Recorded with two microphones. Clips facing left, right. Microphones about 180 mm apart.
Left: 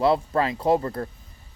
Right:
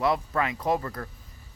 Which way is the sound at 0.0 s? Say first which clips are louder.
Left 5 dB; 30° left (ahead or behind).